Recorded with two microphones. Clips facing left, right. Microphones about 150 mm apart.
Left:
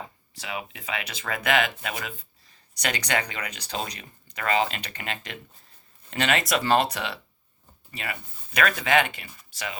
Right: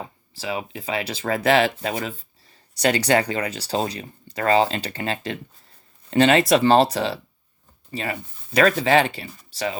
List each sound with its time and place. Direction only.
0.3 s speech: 30° right (ahead or behind)